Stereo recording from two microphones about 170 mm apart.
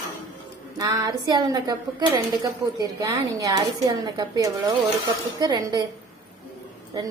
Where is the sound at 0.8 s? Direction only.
20° right (ahead or behind).